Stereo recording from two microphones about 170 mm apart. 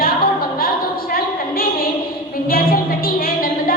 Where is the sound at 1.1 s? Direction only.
60° left (ahead or behind).